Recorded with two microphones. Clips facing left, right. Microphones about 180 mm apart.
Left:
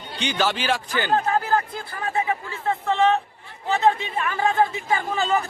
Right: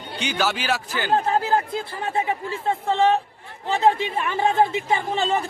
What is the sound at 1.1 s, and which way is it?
Speech, 30° right (ahead or behind).